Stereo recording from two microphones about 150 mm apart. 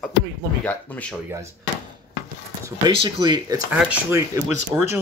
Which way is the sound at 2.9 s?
30° right (ahead or behind).